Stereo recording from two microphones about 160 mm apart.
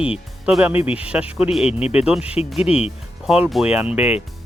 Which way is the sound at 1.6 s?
40° left (ahead or behind).